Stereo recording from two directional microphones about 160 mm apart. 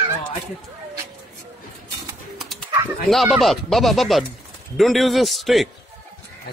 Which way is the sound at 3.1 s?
Centre (ahead or behind).